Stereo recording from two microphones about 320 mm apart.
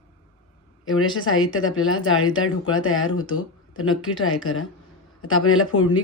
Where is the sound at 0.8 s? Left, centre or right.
Left.